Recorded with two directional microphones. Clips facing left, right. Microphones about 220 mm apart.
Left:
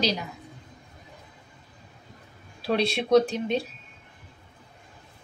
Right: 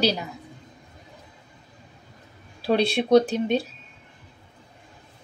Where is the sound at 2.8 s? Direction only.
35° right (ahead or behind).